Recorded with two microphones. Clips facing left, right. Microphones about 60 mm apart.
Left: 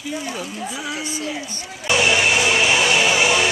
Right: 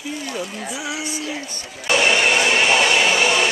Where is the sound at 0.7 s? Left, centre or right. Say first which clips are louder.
Right 2 dB; centre.